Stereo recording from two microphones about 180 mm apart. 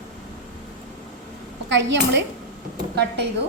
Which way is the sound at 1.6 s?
75° right (ahead or behind).